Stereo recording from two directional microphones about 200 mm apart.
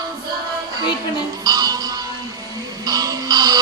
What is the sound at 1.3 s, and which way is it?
Music, 20° right (ahead or behind).